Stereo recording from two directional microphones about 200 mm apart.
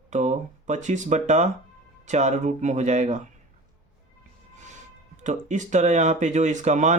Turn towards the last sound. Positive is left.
turn(degrees=-35)  # may be behind; listen again after turning